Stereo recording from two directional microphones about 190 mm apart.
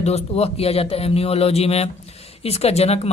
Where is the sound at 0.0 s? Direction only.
35° left (ahead or behind).